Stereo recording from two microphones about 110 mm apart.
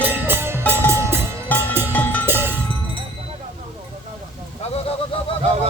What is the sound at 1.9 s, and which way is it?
Cowbell, 15° left (ahead or behind).